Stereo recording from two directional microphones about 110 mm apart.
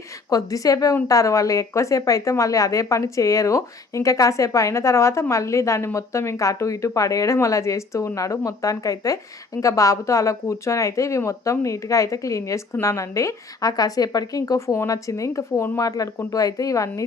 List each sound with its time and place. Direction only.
0.3 s a woman's voice: 30° left (ahead or behind)